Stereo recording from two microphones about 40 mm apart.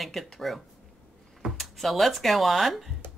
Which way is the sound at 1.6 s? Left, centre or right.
Centre.